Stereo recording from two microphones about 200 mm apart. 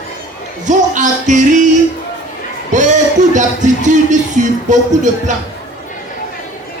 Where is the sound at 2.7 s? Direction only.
40° right (ahead or behind).